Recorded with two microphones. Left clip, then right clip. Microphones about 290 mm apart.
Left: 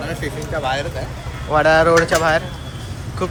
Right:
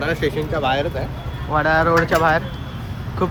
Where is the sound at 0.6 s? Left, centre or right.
Right.